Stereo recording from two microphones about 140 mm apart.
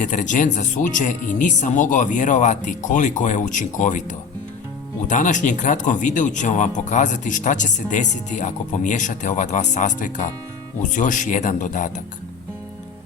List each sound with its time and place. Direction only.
0.0 s speech: 60° left (ahead or behind)
5.0 s speech: 65° left (ahead or behind)